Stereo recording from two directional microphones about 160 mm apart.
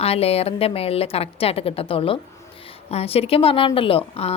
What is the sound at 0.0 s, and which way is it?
A woman's voice, 40° left (ahead or behind).